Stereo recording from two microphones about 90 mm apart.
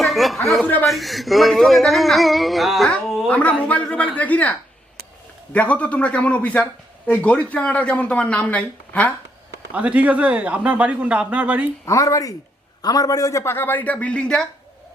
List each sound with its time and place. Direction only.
0.0 s chuckle: centre (ahead or behind)
0.6 s speech: 20° left (ahead or behind)
0.9 s speech: centre (ahead or behind)
3.2 s speech: 15° left (ahead or behind)
5.5 s speech: 15° left (ahead or behind)
9.7 s speech: 15° right (ahead or behind)
11.9 s a man's voice: 35° left (ahead or behind)
13.4 s speech: 25° left (ahead or behind); by 14.4 s 10° left (ahead or behind)